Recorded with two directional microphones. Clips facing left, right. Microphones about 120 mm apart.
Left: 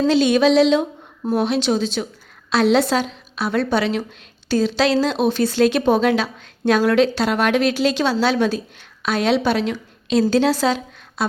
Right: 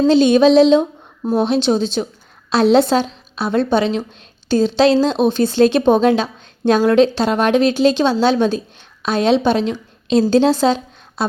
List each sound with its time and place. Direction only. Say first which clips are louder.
0.0 s speech: right 4 dB; 25° right (ahead or behind)